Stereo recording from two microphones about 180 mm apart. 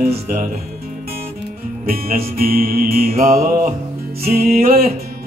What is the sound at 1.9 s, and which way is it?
Music, 55° right (ahead or behind).